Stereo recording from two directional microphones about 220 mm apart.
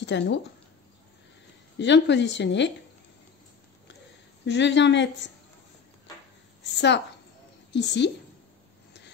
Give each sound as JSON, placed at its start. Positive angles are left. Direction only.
{"t": 0.0, "sound": "a woman's voice", "side_deg": 55}
{"t": 1.8, "sound": "a woman's voice", "side_deg": 55}
{"t": 4.5, "sound": "a woman's voice", "side_deg": 55}
{"t": 6.6, "sound": "a woman's voice", "side_deg": 50}